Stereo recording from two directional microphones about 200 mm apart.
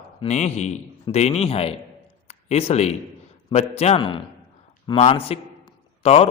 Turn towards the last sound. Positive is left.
turn(degrees=30)  # may be behind; listen again after turning